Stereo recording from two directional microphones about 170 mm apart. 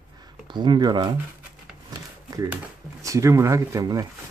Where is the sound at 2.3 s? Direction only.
20° right (ahead or behind).